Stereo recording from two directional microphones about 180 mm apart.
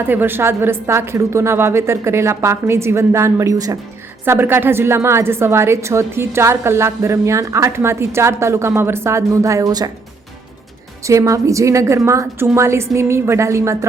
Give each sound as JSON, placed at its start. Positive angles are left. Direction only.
{"t": 0.1, "sound": "a woman's voice", "side_deg": -10}
{"t": 11.0, "sound": "a woman's voice", "side_deg": -15}